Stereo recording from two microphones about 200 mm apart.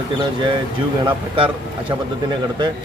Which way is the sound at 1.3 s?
25° right (ahead or behind).